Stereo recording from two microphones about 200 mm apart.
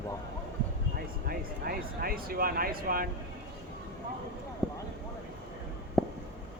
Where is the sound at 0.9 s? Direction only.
50° right (ahead or behind).